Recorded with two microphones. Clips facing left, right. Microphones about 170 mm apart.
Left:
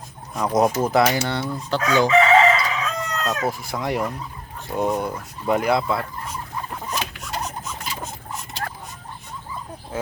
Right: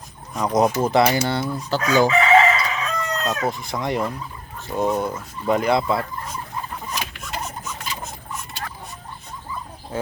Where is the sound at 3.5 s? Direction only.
5° left (ahead or behind).